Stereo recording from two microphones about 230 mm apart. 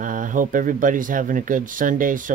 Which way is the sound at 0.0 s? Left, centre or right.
Right.